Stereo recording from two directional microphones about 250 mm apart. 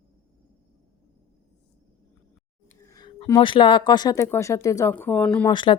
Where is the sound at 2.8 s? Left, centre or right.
Centre.